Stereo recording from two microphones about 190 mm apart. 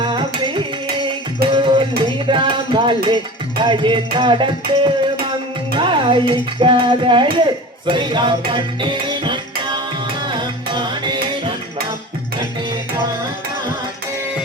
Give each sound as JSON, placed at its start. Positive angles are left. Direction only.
{"t": 0.2, "sound": "music", "side_deg": -25}
{"t": 2.1, "sound": "a sound", "side_deg": -25}
{"t": 3.6, "sound": "speech", "side_deg": -25}
{"t": 7.9, "sound": "music", "side_deg": -25}